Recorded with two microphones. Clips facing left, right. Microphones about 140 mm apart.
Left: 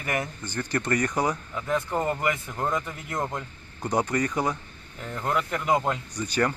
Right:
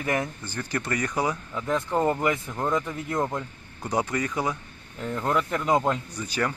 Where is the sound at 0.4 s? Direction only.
5° right (ahead or behind).